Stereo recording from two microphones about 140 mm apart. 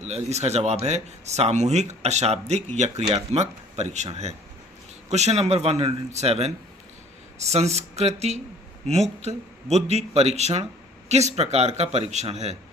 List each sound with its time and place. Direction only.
0.0 s speech: 50° right (ahead or behind)